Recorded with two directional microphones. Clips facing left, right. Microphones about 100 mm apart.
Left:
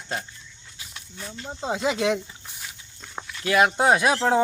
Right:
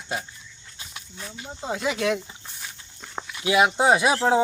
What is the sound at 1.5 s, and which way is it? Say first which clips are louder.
Speech: left 2 dB; 20° left (ahead or behind).